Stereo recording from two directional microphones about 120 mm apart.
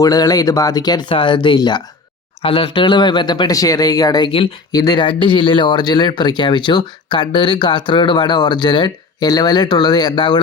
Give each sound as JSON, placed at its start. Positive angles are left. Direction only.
{"t": 0.0, "sound": "speech", "side_deg": 30}
{"t": 2.4, "sound": "speech", "side_deg": 50}